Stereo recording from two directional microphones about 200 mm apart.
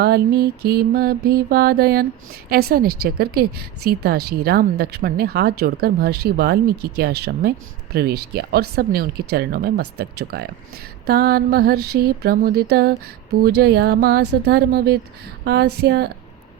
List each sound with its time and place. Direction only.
0.0 s a woman's voice: 50° right (ahead or behind)